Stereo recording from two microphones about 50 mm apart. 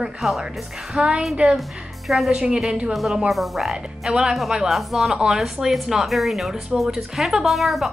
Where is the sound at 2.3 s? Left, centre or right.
Centre.